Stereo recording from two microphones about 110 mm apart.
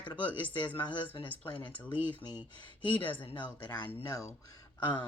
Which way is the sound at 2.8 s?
50° left (ahead or behind).